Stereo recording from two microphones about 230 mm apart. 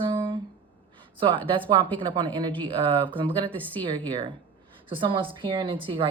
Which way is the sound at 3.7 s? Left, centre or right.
Right.